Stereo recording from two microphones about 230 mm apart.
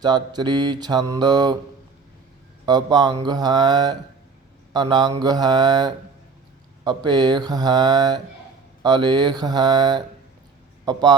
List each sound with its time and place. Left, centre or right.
0.0 s mantra: centre
2.6 s mantra: centre
4.7 s speech: centre
5.2 s mantra: centre